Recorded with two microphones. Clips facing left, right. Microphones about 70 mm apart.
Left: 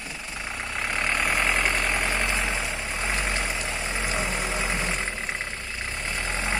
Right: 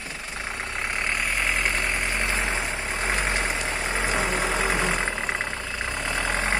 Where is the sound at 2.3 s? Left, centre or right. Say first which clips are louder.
Right 1 dB; right.